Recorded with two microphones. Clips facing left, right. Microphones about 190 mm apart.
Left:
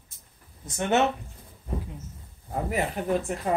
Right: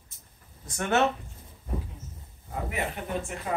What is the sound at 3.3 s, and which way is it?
Speech, 40° left (ahead or behind).